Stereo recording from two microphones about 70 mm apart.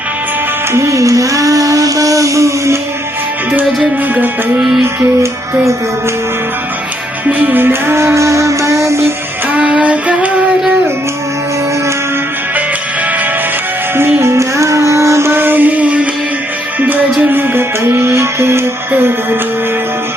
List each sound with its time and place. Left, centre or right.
0.7 s a sound: right
7.3 s music: right
9.6 s music: centre
9.8 s music: right
13.9 s music: right